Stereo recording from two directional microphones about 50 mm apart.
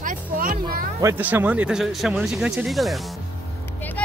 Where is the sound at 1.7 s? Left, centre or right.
Centre.